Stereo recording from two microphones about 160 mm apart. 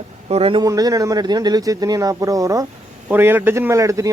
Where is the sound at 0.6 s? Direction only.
25° right (ahead or behind).